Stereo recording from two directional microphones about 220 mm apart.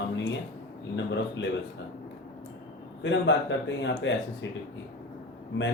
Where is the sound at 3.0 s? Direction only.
55° left (ahead or behind).